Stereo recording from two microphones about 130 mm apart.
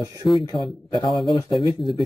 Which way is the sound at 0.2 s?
Centre (ahead or behind).